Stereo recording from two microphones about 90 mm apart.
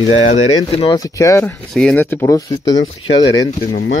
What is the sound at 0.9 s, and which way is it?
Speech, 40° left (ahead or behind).